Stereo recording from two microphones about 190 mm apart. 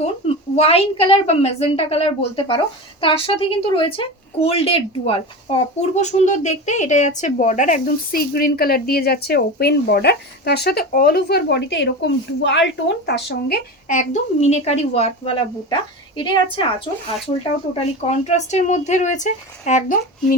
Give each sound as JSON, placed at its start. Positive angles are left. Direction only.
{"t": 0.5, "sound": "a woman's voice", "side_deg": 30}
{"t": 13.8, "sound": "a woman's voice", "side_deg": 40}